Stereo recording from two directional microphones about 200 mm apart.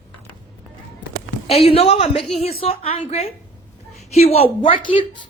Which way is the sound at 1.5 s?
30° left (ahead or behind).